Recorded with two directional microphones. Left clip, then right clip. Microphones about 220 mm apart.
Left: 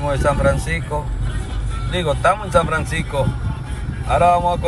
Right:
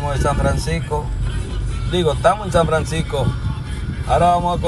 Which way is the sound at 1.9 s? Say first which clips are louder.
Right 1 dB; 20° right (ahead or behind).